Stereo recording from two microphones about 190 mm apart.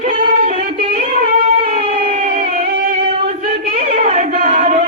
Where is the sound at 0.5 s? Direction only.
30° right (ahead or behind).